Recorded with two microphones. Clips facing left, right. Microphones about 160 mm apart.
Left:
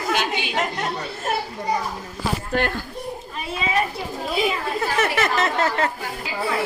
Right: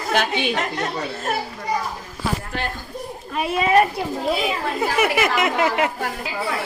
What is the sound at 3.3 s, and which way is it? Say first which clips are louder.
Speech: right 9 dB; 60° right (ahead or behind).